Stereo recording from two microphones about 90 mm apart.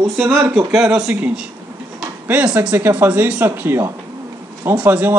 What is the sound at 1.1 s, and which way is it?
Speech, 15° right (ahead or behind).